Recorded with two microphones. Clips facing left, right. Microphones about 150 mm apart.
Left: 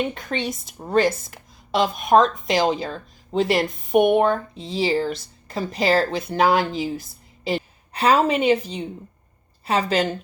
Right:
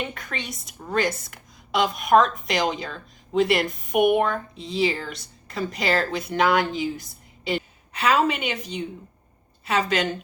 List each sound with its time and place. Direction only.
0.1 s a woman's voice: 30° left (ahead or behind)